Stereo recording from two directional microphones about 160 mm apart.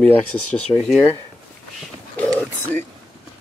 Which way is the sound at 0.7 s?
25° left (ahead or behind).